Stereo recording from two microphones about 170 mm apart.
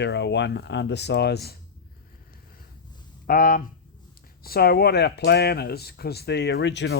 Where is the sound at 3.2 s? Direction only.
60° left (ahead or behind).